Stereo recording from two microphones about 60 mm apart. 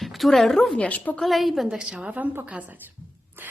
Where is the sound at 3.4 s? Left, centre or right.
Right.